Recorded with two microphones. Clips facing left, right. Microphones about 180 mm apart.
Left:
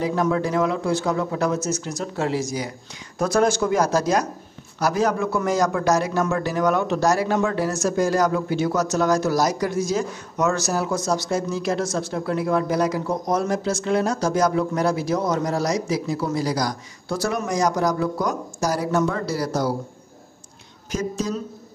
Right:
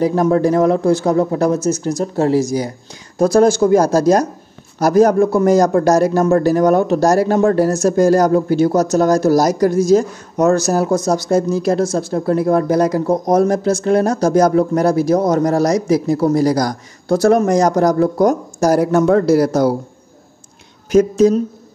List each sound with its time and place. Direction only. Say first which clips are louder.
0.0 s a man's voice: right 8 dB; 40° right (ahead or behind)
20.9 s speech: right 14 dB; 55° right (ahead or behind)